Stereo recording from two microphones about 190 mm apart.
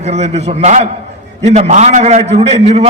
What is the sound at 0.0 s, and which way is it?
A man's voice, 35° right (ahead or behind).